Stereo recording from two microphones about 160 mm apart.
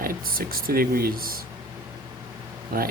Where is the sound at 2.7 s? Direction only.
65° right (ahead or behind).